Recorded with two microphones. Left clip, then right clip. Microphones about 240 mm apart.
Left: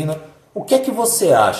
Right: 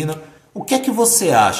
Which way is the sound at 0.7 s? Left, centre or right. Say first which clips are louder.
Left 3 dB; right.